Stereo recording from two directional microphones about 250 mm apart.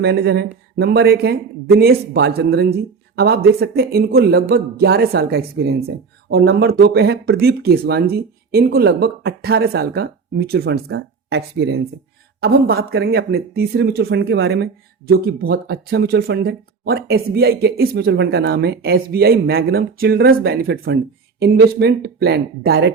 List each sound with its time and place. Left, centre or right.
0.0 s speech: right